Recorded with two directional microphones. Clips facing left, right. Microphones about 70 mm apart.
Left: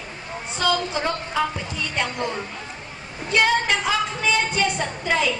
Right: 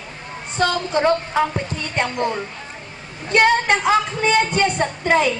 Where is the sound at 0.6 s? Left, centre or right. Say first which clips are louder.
Right 4 dB; right.